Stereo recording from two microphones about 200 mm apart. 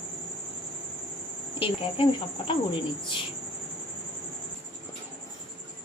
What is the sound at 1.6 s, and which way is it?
Speech, 25° left (ahead or behind).